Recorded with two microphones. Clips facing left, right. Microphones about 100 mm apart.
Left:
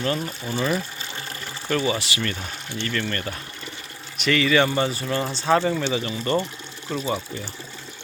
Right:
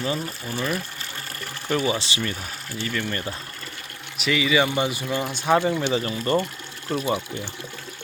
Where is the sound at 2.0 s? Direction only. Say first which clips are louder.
Even; 20° right (ahead or behind).